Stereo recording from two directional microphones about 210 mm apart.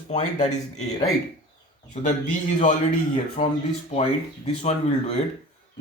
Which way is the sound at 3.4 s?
25° left (ahead or behind).